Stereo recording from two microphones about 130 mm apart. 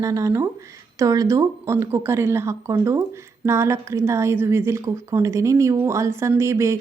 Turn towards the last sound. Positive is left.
turn(degrees=-20)  # may be behind; listen again after turning